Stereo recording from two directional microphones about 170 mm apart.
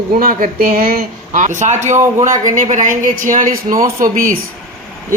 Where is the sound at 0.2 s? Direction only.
55° right (ahead or behind).